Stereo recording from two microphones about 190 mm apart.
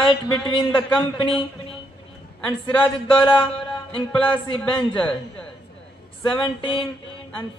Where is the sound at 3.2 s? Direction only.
25° left (ahead or behind).